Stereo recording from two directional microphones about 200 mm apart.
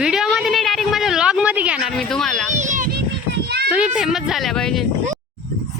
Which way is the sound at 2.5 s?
35° right (ahead or behind).